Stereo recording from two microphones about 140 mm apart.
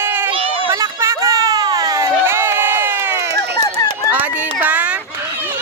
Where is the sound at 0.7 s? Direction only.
20° right (ahead or behind).